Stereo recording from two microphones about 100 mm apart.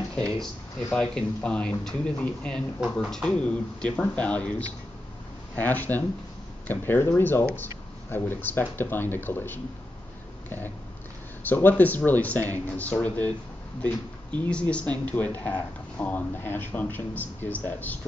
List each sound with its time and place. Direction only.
0.1 s a sound: 10° left (ahead or behind)
0.9 s a man's voice: 10° left (ahead or behind)
11.4 s speech: 20° left (ahead or behind)